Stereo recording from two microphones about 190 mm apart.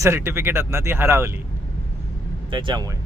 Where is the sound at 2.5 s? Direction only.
25° right (ahead or behind).